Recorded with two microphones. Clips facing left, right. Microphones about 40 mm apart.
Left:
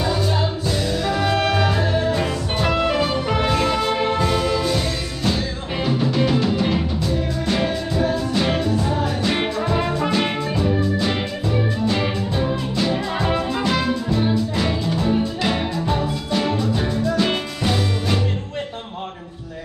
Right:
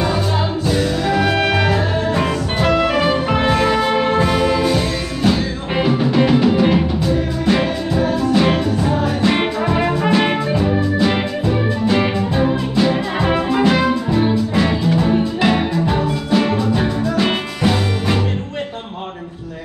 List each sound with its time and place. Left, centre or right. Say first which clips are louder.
1.0 s music: right 2 dB; centre